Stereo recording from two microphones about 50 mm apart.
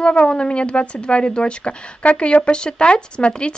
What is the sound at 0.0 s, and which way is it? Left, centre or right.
A woman's voice, centre.